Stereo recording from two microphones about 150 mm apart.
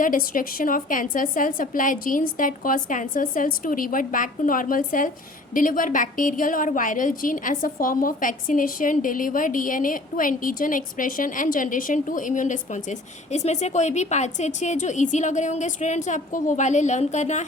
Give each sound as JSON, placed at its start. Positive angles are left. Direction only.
{"t": 0.0, "sound": "a woman's voice", "side_deg": 65}